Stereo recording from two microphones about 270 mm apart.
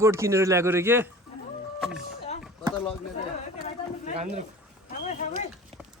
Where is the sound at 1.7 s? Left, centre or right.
Centre.